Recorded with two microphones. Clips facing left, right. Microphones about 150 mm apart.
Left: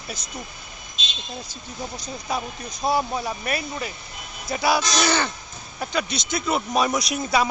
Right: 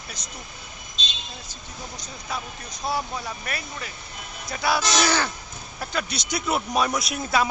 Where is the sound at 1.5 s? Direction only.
10° left (ahead or behind).